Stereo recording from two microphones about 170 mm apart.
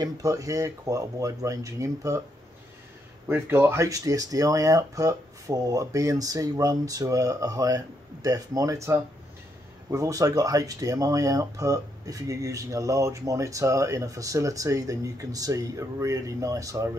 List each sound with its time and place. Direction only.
0.0 s speech: 20° right (ahead or behind)
3.3 s speech: 15° right (ahead or behind)